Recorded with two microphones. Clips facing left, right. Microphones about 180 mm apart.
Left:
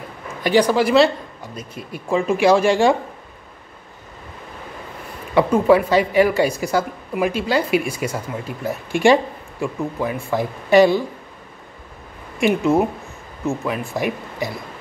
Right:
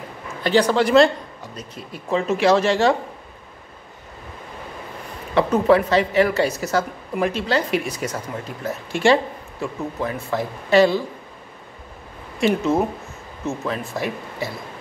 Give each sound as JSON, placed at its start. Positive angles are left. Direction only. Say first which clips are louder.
{"t": 0.4, "sound": "a woman's voice", "louder": "left 1 dB", "side_deg": 10}
{"t": 5.3, "sound": "a woman's voice", "louder": "left 2 dB", "side_deg": 10}
{"t": 12.4, "sound": "a woman's voice", "louder": "left 2 dB", "side_deg": 15}